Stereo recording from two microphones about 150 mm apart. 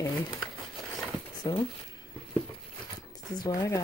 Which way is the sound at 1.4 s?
25° left (ahead or behind).